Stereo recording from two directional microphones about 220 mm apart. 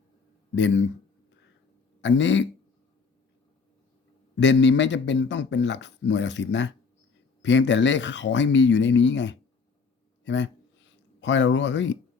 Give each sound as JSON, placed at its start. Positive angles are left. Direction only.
{"t": 0.5, "sound": "speech", "side_deg": 55}
{"t": 2.0, "sound": "a man's voice", "side_deg": 55}
{"t": 4.4, "sound": "a man's voice", "side_deg": 55}
{"t": 10.2, "sound": "a sound", "side_deg": 55}